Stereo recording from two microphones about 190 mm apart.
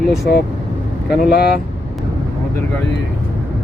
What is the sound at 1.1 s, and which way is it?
Speech, 55° left (ahead or behind).